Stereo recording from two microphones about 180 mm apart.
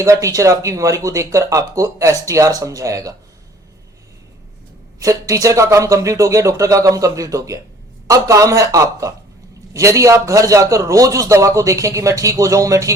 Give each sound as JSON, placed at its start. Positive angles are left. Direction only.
{"t": 0.0, "sound": "a man's voice", "side_deg": -15}
{"t": 4.9, "sound": "a man's voice", "side_deg": -20}